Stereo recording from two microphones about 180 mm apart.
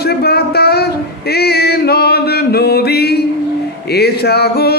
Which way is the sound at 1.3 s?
65° left (ahead or behind).